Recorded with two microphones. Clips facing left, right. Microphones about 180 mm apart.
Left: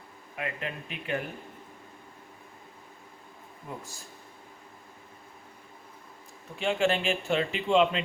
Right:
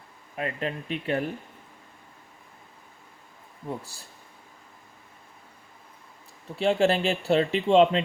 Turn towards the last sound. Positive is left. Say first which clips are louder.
# right 5 dB
turn(degrees=-35)  # may be behind; listen again after turning